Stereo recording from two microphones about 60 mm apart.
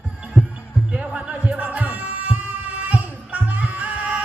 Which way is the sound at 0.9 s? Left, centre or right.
Centre.